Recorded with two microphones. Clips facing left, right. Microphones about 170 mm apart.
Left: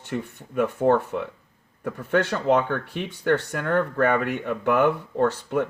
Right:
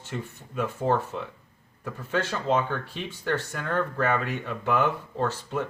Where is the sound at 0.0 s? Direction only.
60° left (ahead or behind).